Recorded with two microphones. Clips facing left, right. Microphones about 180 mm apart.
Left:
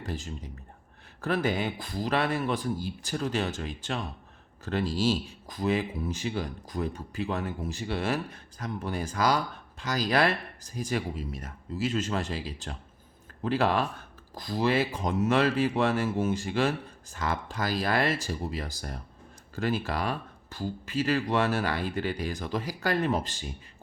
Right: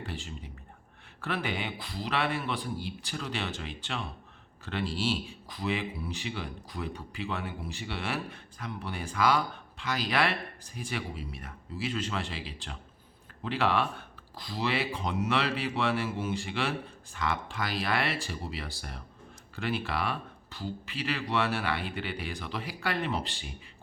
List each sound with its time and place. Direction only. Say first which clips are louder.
0.0 s a man's voice: left 3 dB; 40° left (ahead or behind)